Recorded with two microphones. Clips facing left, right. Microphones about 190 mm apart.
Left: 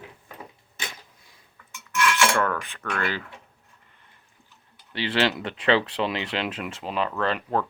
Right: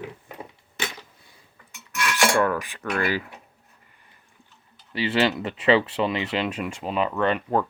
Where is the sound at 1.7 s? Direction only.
35° right (ahead or behind).